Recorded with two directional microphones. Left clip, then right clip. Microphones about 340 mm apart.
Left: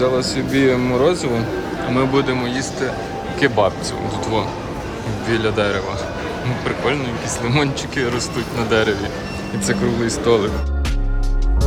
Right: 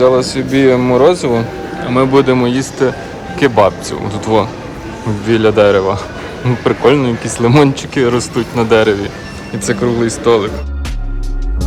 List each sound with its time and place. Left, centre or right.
0.0 s speech: centre